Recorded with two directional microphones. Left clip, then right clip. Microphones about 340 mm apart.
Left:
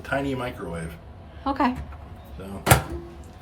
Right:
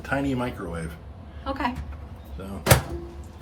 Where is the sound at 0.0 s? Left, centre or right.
Centre.